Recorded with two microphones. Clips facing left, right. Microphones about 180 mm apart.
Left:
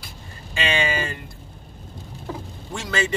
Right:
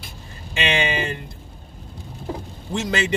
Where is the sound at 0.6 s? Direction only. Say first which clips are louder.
Right 1 dB; 20° right (ahead or behind).